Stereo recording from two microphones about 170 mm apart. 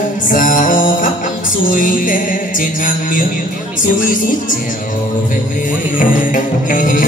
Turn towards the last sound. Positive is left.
turn(degrees=55)  # may be behind; listen again after turning